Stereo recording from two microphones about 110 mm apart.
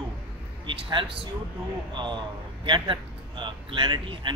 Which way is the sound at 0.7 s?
50° right (ahead or behind).